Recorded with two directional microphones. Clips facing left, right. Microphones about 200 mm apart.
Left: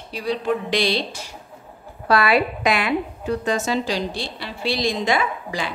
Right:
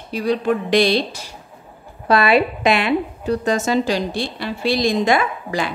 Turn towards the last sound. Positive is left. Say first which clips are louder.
# right 3 dB
turn(degrees=-50)  # may be behind; listen again after turning